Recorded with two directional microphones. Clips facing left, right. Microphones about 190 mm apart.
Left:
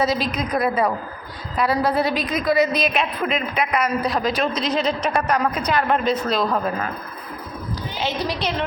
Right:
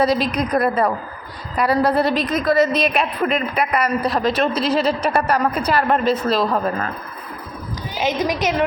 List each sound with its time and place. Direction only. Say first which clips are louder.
0.0 s a woman's voice: right 4 dB; 5° left (ahead or behind)
8.0 s a woman's voice: right 5 dB; 15° right (ahead or behind)